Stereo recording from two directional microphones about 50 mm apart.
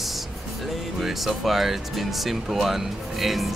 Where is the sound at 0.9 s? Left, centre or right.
Centre.